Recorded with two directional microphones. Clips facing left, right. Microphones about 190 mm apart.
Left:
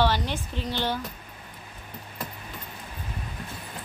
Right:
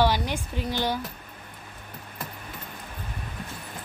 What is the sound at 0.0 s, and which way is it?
A woman's voice, 10° right (ahead or behind).